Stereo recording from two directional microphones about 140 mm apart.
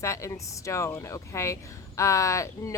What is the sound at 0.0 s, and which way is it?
Speech, 20° left (ahead or behind).